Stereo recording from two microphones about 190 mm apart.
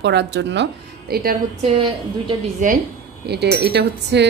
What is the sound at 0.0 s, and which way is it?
Chink, 65° right (ahead or behind).